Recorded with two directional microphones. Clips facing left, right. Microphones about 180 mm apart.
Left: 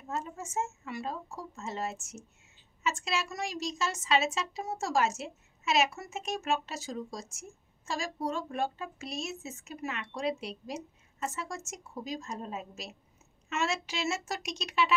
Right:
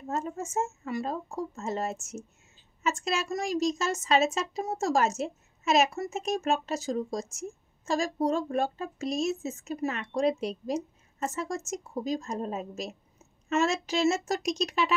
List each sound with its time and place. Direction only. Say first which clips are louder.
0.1 s a woman's voice: right 4 dB; 45° right (ahead or behind)